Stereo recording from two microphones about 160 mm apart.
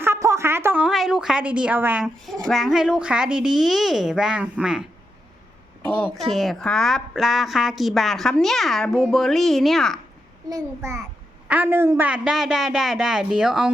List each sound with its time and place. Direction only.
0.0 s a woman's voice: 15° right (ahead or behind)
6.1 s a woman's voice: centre (ahead or behind)
10.5 s a woman's voice: 20° right (ahead or behind)